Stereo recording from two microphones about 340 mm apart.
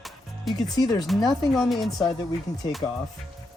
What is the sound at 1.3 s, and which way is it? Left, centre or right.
Speech, centre.